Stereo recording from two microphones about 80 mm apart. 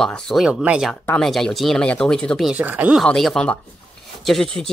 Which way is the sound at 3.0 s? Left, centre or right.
Centre.